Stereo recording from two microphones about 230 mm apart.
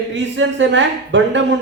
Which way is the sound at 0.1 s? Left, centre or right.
Right.